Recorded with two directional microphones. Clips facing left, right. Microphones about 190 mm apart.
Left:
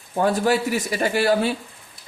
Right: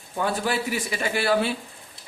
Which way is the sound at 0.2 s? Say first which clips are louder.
Left 6 dB; 45° left (ahead or behind).